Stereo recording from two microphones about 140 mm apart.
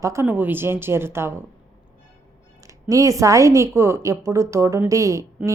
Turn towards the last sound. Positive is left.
turn(degrees=-25)  # may be behind; listen again after turning